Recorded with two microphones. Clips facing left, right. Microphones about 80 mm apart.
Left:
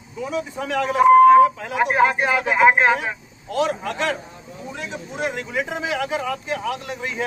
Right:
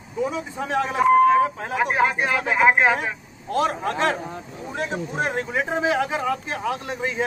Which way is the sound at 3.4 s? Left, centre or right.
Right.